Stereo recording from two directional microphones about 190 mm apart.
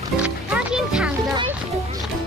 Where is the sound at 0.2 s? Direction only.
5° right (ahead or behind).